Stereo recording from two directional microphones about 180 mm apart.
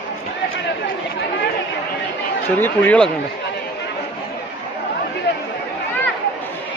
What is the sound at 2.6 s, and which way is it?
Speech, 10° left (ahead or behind).